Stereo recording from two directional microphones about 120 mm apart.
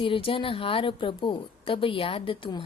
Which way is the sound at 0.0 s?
50° left (ahead or behind).